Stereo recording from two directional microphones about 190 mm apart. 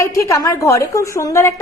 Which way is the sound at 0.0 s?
15° left (ahead or behind).